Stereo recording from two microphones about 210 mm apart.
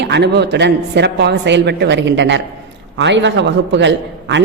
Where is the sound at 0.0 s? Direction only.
55° right (ahead or behind).